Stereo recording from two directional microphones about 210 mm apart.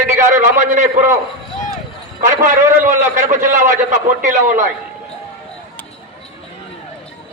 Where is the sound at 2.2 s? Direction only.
35° right (ahead or behind).